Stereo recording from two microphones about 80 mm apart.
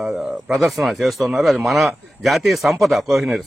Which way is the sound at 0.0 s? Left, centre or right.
Centre.